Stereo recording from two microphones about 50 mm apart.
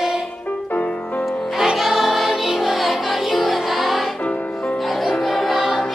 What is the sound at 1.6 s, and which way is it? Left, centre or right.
Music, centre.